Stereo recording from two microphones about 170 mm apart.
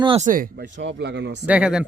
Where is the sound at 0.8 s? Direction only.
90° right.